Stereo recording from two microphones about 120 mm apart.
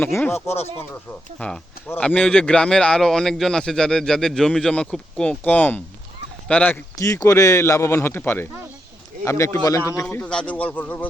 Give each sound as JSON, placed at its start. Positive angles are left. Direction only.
{"t": 0.0, "sound": "a man's voice", "side_deg": 20}
{"t": 7.0, "sound": "speech", "side_deg": 25}
{"t": 10.2, "sound": "a man's voice", "side_deg": 10}